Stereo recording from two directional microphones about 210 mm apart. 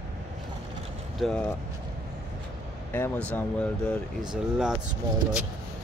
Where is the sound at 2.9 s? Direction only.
10° left (ahead or behind).